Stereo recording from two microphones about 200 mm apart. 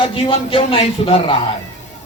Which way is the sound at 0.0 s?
25° left (ahead or behind).